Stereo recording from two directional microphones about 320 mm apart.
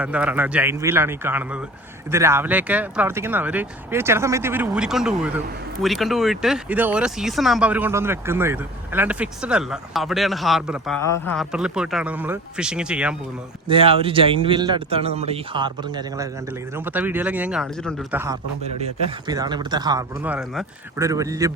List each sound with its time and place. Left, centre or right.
0.0 s speech: centre
13.7 s speech: centre